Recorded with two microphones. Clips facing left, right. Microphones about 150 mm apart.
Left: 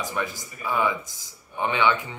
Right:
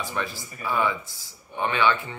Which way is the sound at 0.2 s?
15° left (ahead or behind).